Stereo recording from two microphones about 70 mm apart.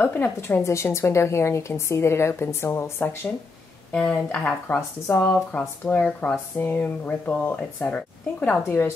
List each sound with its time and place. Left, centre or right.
0.0 s a woman's voice: left
4.1 s speech: centre
4.7 s a woman's voice: left
5.5 s speech: left
8.6 s a woman's voice: left